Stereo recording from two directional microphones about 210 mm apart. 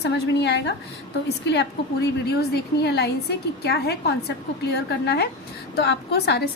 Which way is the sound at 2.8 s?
50° left (ahead or behind).